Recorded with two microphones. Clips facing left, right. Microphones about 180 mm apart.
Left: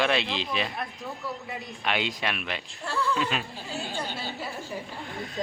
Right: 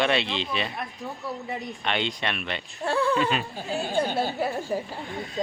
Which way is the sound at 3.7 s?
55° right (ahead or behind).